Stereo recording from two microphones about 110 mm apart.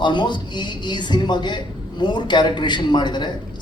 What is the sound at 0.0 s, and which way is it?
A man's voice, 45° left (ahead or behind).